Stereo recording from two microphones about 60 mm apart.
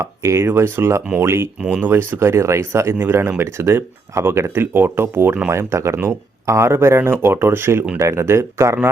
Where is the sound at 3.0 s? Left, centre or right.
Right.